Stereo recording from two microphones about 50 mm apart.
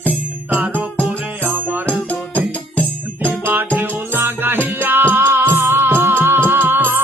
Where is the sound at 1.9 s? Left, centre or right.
Left.